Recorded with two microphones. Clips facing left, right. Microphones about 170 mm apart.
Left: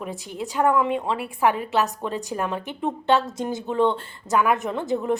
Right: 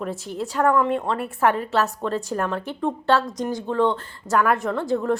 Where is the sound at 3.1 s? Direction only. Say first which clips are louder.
Even; 20° left (ahead or behind).